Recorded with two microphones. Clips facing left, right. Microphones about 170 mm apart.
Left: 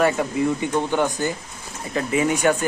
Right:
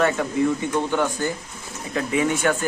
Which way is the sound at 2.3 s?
15° left (ahead or behind).